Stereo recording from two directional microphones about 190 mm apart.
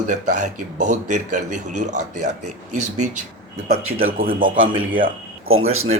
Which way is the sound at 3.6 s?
90° right.